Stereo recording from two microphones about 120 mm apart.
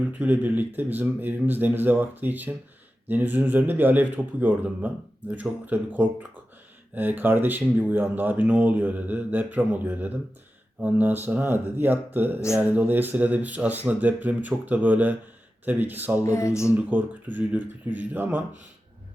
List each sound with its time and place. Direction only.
0.0 s speech: 15° right (ahead or behind)
16.2 s speech: 25° left (ahead or behind)
16.7 s speech: 15° right (ahead or behind)